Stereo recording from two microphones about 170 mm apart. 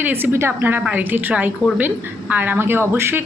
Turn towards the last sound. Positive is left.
turn(degrees=-15)  # may be behind; listen again after turning